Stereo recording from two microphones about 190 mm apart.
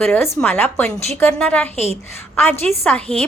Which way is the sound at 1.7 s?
30° right (ahead or behind).